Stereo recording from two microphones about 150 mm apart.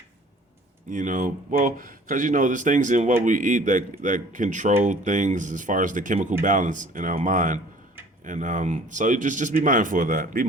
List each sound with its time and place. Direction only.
0.9 s speech: 55° right (ahead or behind)